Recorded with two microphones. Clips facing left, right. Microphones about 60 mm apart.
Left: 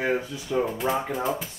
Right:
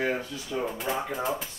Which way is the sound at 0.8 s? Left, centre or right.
Left.